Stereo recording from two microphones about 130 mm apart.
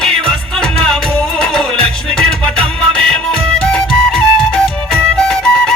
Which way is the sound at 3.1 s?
5° left (ahead or behind).